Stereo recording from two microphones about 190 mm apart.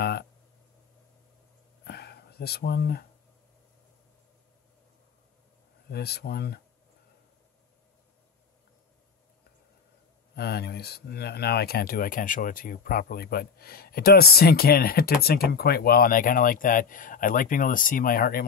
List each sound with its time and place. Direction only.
0.0 s speech: 55° left (ahead or behind)
1.9 s a sound: 55° left (ahead or behind)
5.9 s speech: 55° left (ahead or behind)
10.3 s speech: 55° left (ahead or behind)